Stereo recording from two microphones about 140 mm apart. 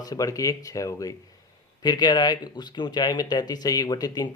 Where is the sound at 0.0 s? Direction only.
25° left (ahead or behind).